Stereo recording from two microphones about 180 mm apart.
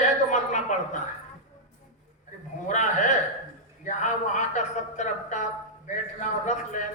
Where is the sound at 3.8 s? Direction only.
45° left (ahead or behind).